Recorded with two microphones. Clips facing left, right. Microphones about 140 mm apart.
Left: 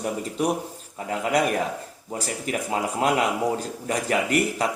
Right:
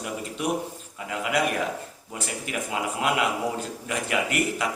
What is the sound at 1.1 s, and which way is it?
Speech, 40° left (ahead or behind).